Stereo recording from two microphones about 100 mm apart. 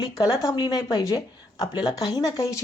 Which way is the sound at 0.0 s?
35° left (ahead or behind).